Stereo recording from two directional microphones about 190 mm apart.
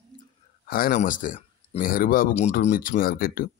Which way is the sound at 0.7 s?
50° left (ahead or behind).